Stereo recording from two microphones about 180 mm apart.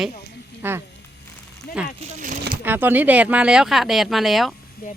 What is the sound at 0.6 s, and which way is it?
Speech, 10° right (ahead or behind).